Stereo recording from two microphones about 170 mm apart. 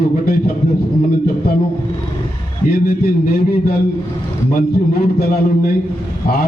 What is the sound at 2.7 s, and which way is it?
A man's voice, 60° left (ahead or behind).